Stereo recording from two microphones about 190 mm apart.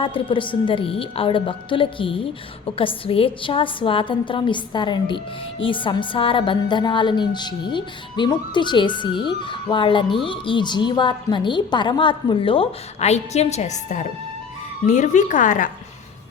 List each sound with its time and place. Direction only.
0.0 s a woman's voice: 25° left (ahead or behind); by 15.7 s 45° left (ahead or behind)